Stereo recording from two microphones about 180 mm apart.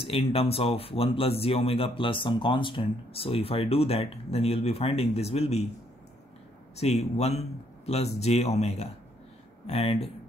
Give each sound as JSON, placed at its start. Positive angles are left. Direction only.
{"t": 0.0, "sound": "speech", "side_deg": 30}
{"t": 6.8, "sound": "speech", "side_deg": 35}